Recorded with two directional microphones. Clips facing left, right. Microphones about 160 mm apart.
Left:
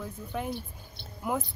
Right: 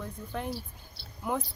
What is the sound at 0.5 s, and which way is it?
Speech, 20° left (ahead or behind).